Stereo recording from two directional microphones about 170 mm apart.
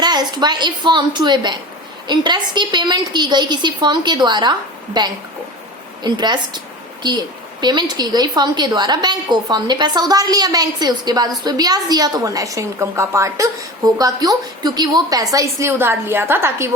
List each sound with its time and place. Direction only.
0.0 s a woman's voice: 25° right (ahead or behind)